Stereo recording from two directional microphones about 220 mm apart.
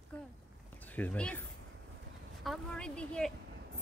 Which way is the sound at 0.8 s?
5° left (ahead or behind).